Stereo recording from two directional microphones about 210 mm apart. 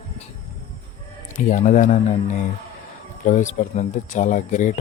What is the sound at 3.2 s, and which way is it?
Speech, 35° left (ahead or behind).